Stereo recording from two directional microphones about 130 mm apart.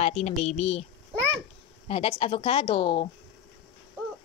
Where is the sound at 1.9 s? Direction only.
45° left (ahead or behind).